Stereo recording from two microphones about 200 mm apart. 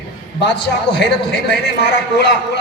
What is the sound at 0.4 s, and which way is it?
A man's voice, 55° left (ahead or behind).